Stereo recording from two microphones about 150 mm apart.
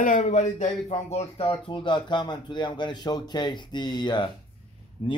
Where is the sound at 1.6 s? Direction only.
35° left (ahead or behind).